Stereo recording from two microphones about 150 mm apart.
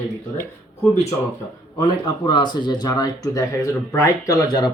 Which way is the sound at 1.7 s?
35° left (ahead or behind).